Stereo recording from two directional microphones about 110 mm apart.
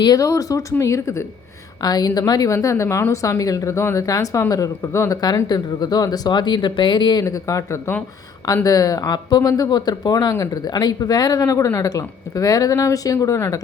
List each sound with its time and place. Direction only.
0.0 s speech: 35° left (ahead or behind)
7.3 s speech: 30° left (ahead or behind)